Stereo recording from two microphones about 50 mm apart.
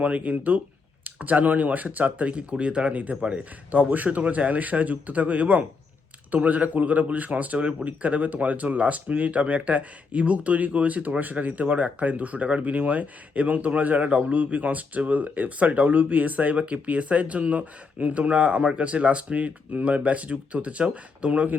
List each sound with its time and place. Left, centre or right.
0.0 s a man's voice: right